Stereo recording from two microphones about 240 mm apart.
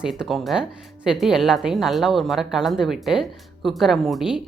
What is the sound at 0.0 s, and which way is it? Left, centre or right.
Speech, centre.